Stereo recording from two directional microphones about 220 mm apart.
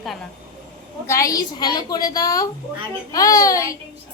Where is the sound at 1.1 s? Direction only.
15° left (ahead or behind).